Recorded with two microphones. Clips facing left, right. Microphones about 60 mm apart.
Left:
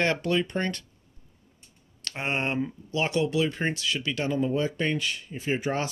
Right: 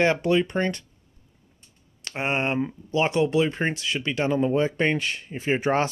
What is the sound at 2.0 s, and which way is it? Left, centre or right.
Speech, right.